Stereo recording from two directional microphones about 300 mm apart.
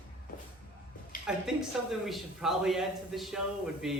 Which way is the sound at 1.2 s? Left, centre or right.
Centre.